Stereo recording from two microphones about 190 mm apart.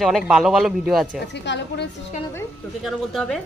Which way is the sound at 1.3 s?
65° left (ahead or behind).